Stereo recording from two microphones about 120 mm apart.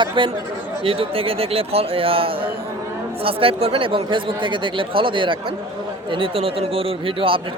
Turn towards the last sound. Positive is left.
turn(degrees=-50)  # may be behind; listen again after turning